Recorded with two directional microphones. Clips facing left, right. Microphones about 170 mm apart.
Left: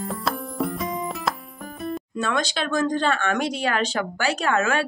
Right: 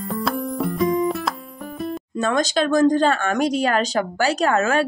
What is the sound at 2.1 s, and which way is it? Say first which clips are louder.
Speech: right 6 dB; 45° right (ahead or behind).